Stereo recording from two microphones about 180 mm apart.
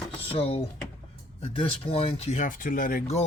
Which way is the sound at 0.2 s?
35° left (ahead or behind).